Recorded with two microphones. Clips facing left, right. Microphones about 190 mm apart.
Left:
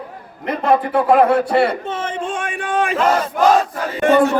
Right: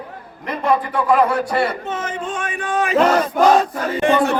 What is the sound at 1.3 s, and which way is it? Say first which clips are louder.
A man's voice: left 4 dB; 25° left (ahead or behind).